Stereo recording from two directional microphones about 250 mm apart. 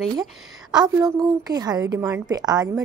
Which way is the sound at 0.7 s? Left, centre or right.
Centre.